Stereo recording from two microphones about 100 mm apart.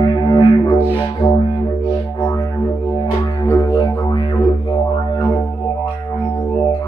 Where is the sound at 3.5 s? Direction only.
30° left (ahead or behind).